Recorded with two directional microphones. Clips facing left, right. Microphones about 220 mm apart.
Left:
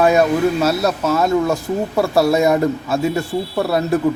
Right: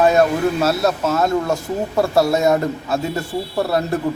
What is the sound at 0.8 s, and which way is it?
A man's voice, centre (ahead or behind).